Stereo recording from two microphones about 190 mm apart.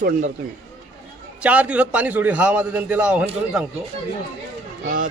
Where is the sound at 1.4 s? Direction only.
5° right (ahead or behind).